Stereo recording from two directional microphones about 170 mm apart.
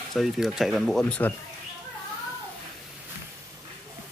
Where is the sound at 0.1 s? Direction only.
Centre (ahead or behind).